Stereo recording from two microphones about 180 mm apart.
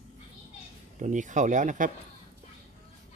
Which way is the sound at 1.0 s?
45° right (ahead or behind).